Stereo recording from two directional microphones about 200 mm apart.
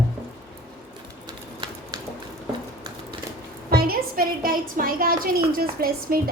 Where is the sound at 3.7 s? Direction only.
50° right (ahead or behind).